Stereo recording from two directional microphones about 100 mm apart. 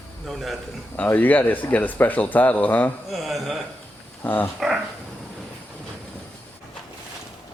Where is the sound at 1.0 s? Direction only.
15° left (ahead or behind).